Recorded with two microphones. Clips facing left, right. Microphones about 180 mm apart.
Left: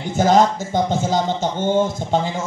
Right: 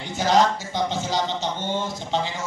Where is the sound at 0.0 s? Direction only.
50° left (ahead or behind).